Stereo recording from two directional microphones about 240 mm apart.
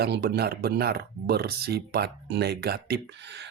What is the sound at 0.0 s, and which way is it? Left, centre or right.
Speech, right.